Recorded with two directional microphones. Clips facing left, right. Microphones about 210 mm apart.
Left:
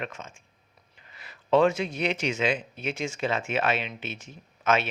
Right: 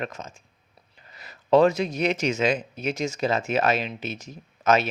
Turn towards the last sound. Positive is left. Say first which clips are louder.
# right 4 dB
turn(degrees=-40)  # may be behind; listen again after turning